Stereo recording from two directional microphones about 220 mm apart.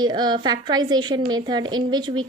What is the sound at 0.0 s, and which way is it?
Speech, 20° right (ahead or behind).